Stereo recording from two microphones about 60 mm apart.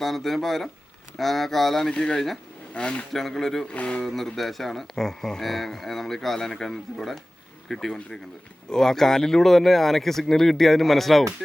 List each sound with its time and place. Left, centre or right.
0.0 s speech: centre
3.1 s speech: centre
3.7 s speech: centre
4.0 s speech: centre